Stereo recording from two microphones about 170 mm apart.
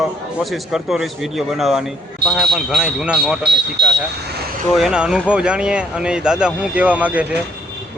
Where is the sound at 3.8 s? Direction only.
85° right.